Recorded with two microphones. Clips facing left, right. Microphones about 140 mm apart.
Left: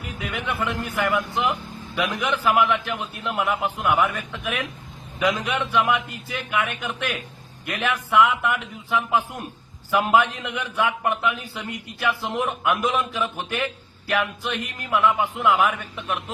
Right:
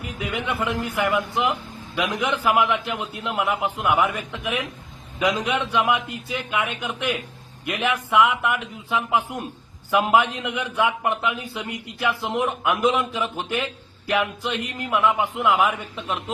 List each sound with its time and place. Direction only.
0.2 s a man's voice: 15° right (ahead or behind)